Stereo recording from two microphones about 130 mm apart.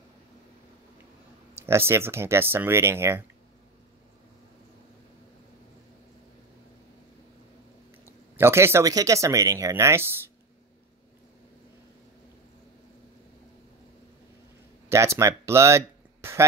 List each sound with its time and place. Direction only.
1.6 s speech: 20° right (ahead or behind)
8.0 s speech: 20° right (ahead or behind)
14.9 s speech: 20° right (ahead or behind)